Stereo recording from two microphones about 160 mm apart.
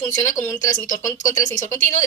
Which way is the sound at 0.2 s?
20° left (ahead or behind).